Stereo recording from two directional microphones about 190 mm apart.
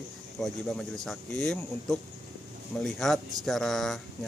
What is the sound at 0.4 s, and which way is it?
Speech, centre (ahead or behind).